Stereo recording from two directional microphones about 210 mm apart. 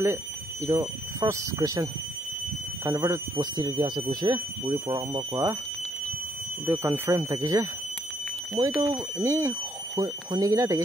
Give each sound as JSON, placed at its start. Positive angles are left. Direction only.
{"t": 0.7, "sound": "speech", "side_deg": -15}
{"t": 6.6, "sound": "speech", "side_deg": -10}
{"t": 8.7, "sound": "speech", "side_deg": -10}